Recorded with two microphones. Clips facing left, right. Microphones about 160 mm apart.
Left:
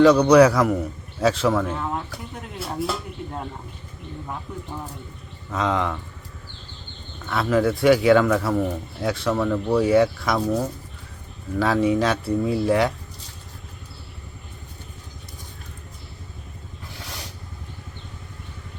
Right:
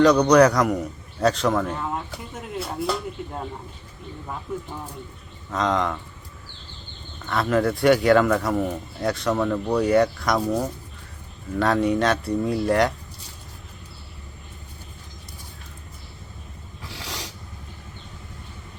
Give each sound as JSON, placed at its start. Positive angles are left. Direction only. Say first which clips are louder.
{"t": 0.0, "sound": "speech", "louder": "left 2 dB", "side_deg": 5}
{"t": 4.5, "sound": "speech", "louder": "right 2 dB", "side_deg": -5}
{"t": 7.3, "sound": "speech", "louder": "left 1 dB", "side_deg": 0}
{"t": 11.5, "sound": "speech", "louder": "left 1 dB", "side_deg": 0}
{"t": 16.9, "sound": "a sound", "louder": "right 3 dB", "side_deg": -90}